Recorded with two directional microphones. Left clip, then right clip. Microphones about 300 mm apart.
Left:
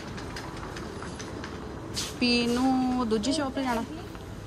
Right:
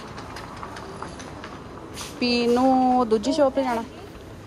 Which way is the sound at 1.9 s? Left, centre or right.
Centre.